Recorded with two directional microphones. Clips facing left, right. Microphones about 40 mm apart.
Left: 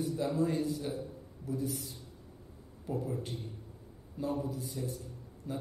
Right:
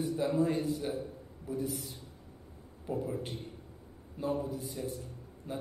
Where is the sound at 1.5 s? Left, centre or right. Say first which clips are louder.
Right 1 dB; right.